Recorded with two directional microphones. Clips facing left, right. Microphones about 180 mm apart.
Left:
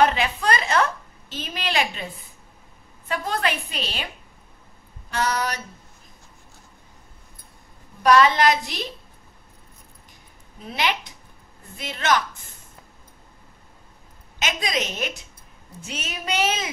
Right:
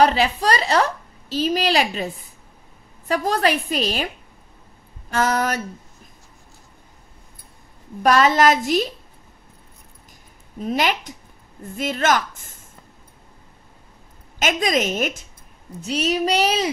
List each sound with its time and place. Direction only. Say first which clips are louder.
0.0 s a woman's voice: right 3 dB; 35° right (ahead or behind)
3.1 s a woman's voice: right 6 dB; 40° right (ahead or behind)
5.1 s a woman's voice: right 5 dB; 45° right (ahead or behind)
8.0 s a woman's voice: right 1 dB; 45° right (ahead or behind)
10.7 s a woman's voice: right 4 dB; 45° right (ahead or behind)
14.4 s a woman's voice: right 6 dB; 45° right (ahead or behind)
15.8 s a woman's voice: right 13 dB; 35° right (ahead or behind)